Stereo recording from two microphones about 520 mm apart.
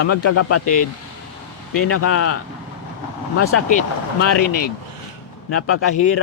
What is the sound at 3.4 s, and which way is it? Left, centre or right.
Speech, left.